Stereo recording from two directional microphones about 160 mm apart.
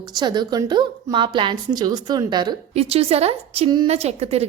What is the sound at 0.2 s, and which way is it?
A woman's voice, 25° right (ahead or behind).